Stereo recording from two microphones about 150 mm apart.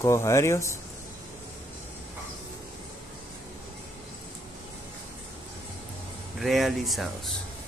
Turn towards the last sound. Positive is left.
turn(degrees=0)  # may be behind; listen again after turning